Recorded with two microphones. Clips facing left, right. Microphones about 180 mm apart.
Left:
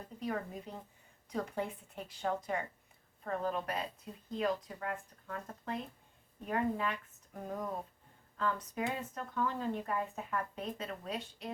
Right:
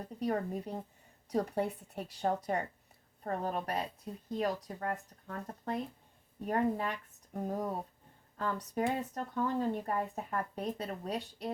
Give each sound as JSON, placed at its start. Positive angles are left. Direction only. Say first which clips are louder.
{"t": 0.2, "sound": "speech", "louder": "right 5 dB", "side_deg": -35}